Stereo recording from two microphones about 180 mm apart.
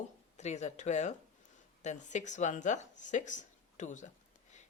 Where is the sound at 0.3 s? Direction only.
40° left (ahead or behind).